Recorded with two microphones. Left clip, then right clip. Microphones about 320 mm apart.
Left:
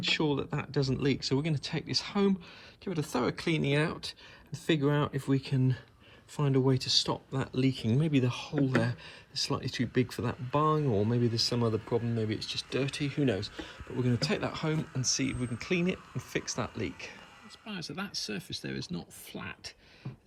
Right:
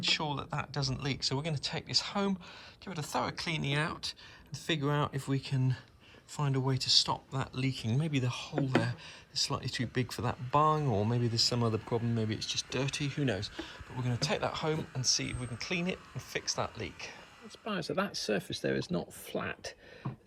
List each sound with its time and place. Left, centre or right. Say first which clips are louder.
0.0 s speech: left 2 dB; centre
11.9 s speech: left 3 dB; right
12.3 s speech: left 1 dB; centre
17.7 s speech: right 6 dB; centre